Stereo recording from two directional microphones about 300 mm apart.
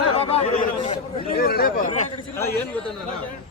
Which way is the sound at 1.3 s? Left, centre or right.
Left.